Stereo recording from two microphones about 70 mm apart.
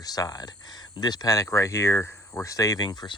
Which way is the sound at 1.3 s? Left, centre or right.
Left.